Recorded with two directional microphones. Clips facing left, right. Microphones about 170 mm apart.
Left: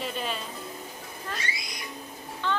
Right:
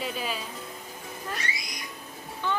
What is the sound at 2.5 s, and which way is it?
Music, 10° right (ahead or behind).